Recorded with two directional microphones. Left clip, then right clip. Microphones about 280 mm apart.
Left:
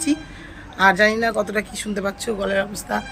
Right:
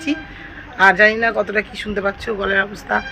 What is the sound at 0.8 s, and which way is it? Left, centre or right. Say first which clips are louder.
A man's voice: right 4 dB; centre.